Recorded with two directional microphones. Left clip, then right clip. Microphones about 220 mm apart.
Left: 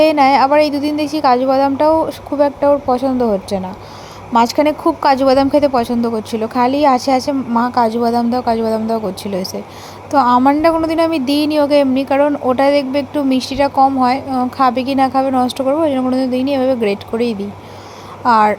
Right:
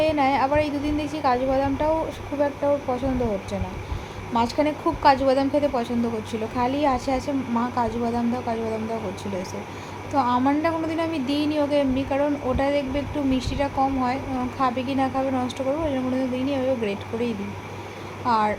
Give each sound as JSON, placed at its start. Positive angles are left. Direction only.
{"t": 0.0, "sound": "a woman's voice", "side_deg": 40}
{"t": 10.1, "sound": "a woman's voice", "side_deg": 40}